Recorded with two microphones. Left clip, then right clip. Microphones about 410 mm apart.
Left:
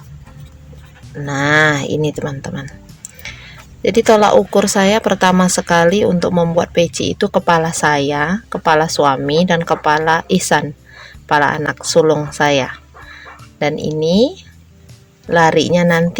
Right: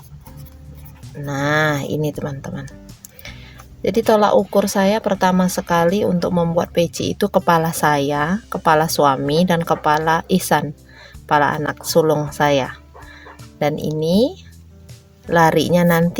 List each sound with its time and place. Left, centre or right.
1.2 s speech: right
3.8 s speech: right